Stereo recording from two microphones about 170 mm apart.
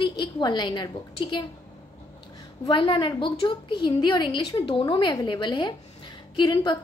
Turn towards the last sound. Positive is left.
turn(degrees=25)  # may be behind; listen again after turning